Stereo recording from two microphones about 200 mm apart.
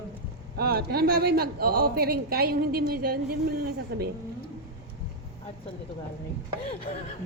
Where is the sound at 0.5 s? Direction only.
50° right (ahead or behind).